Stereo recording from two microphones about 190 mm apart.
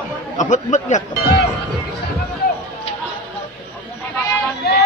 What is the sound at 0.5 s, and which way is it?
Speech, 40° left (ahead or behind).